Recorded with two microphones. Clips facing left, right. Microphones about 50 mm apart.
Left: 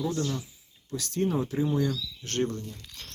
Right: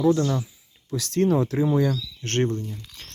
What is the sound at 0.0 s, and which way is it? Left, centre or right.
Speech, right.